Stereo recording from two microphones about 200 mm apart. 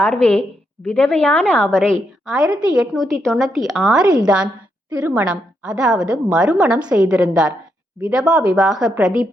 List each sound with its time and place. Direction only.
0.0 s a woman's voice: 5° left (ahead or behind)